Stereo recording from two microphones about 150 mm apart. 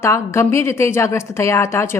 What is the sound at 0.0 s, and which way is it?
A woman's voice, 20° left (ahead or behind).